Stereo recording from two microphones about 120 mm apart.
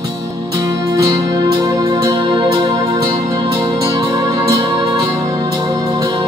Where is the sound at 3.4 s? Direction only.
45° right (ahead or behind).